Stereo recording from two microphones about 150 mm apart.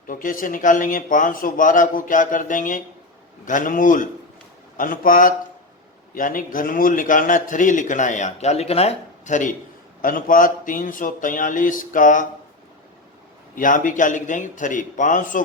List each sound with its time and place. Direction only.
0.1 s a man's voice: 65° left (ahead or behind)
10.0 s a man's voice: 70° left (ahead or behind)
13.6 s a man's voice: 60° left (ahead or behind)